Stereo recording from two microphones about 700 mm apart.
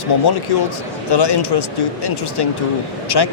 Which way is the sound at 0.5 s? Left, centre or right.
Left.